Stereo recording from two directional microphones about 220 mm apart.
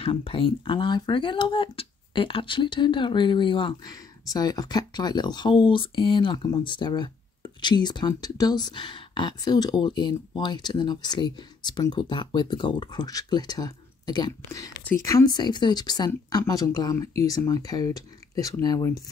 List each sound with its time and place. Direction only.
0.0 s speech: 25° left (ahead or behind)